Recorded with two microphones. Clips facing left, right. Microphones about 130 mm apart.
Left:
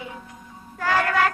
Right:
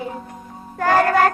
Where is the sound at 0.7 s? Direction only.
45° right (ahead or behind).